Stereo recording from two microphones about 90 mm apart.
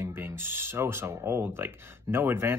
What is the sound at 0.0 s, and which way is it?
Speech, 25° right (ahead or behind).